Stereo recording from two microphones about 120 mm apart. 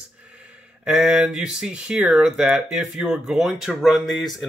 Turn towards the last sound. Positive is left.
turn(degrees=0)  # may be behind; listen again after turning